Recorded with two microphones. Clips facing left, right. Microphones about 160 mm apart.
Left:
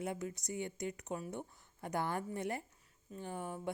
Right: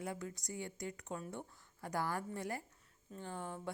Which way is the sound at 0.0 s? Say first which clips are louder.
Left 3 dB; 20° left (ahead or behind).